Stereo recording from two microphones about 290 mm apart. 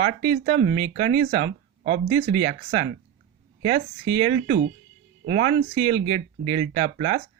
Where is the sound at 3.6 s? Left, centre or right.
Centre.